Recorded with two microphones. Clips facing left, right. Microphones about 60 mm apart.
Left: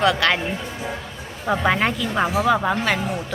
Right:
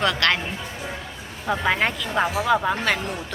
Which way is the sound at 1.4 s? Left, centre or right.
Centre.